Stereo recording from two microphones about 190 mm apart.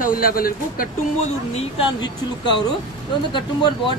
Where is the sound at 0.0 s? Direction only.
50° left (ahead or behind).